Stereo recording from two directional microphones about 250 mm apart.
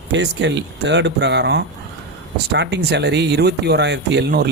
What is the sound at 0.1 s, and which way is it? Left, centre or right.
Speech, right.